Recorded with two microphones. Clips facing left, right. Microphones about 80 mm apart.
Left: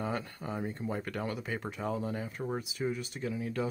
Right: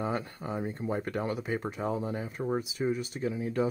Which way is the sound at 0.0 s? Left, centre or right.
Right.